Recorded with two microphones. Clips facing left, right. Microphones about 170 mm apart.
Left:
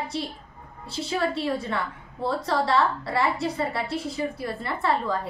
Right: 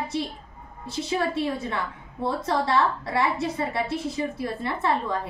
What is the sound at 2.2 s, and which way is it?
A woman's voice, 20° right (ahead or behind).